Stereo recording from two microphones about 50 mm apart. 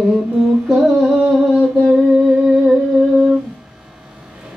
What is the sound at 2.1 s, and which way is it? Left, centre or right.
Music, centre.